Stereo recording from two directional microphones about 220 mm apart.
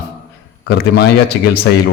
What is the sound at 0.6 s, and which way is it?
Speech, 45° left (ahead or behind).